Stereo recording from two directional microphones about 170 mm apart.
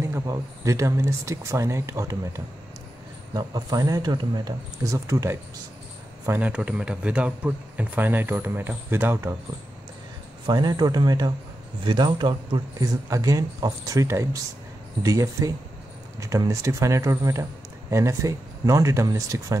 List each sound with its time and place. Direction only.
0.0 s speech: 15° right (ahead or behind)
10.4 s speech: 25° right (ahead or behind)